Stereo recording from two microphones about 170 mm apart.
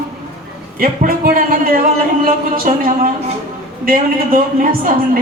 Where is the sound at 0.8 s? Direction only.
55° right (ahead or behind).